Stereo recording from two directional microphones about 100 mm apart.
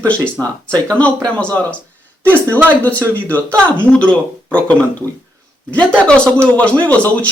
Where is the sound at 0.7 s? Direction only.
15° left (ahead or behind).